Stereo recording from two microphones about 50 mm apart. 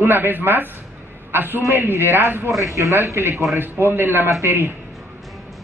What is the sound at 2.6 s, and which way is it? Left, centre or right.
Speech, right.